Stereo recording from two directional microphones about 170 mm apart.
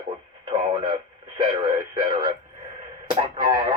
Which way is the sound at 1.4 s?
25° right (ahead or behind).